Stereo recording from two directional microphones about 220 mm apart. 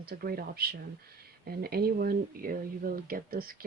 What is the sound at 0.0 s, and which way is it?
Speech, 45° right (ahead or behind).